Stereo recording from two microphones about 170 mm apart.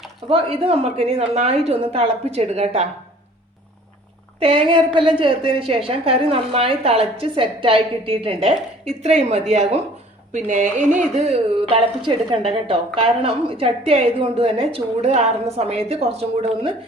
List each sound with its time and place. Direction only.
0.3 s a woman's voice: 35° right (ahead or behind)
4.4 s a woman's voice: 35° right (ahead or behind)